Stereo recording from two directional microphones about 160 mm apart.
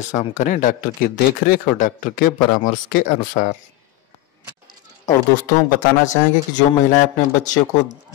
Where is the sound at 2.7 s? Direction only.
55° left (ahead or behind).